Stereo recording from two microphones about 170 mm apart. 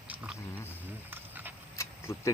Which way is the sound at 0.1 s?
10° right (ahead or behind).